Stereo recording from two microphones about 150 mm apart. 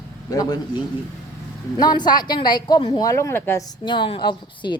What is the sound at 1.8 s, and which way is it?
Speech, 30° left (ahead or behind).